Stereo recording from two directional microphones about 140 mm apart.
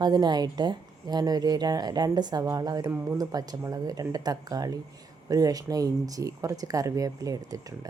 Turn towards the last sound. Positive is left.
turn(degrees=-25)  # may be behind; listen again after turning